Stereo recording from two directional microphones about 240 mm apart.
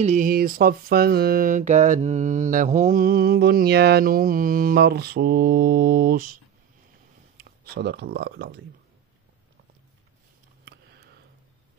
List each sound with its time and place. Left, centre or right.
0.0 s mantra: right
7.3 s speech: right